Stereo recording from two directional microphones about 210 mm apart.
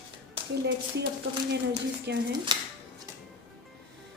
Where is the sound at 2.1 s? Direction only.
55° right (ahead or behind).